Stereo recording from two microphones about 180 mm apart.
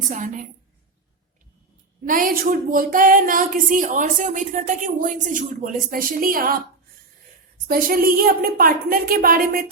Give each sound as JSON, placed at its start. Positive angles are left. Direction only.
{"t": 0.1, "sound": "speech", "side_deg": -45}
{"t": 2.0, "sound": "speech", "side_deg": -50}
{"t": 7.7, "sound": "speech", "side_deg": -55}